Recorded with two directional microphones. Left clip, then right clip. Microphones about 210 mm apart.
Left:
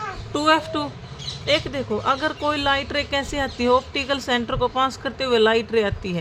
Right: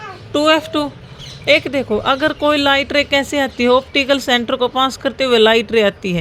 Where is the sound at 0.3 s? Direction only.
20° right (ahead or behind).